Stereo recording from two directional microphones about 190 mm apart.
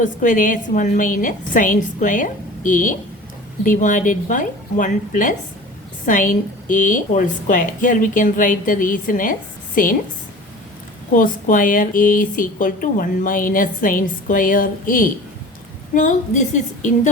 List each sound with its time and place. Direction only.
0.0 s speech: 45° left (ahead or behind)
11.1 s a woman's voice: 45° left (ahead or behind)